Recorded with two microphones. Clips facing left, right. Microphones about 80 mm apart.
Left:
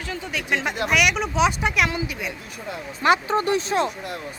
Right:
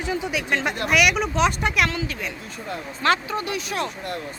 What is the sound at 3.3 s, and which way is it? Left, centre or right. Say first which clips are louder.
Speech: left 6 dB; left.